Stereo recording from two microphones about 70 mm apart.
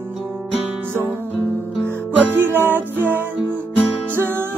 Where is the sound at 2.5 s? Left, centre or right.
Right.